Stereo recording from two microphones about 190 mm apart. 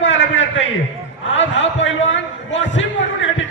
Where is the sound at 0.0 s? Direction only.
75° left (ahead or behind).